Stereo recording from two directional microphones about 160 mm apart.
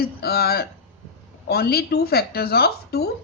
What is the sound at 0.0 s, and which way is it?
Speech, 75° left (ahead or behind).